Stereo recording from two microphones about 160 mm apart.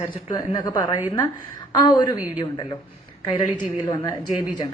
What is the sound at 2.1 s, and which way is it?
Speech, 10° right (ahead or behind).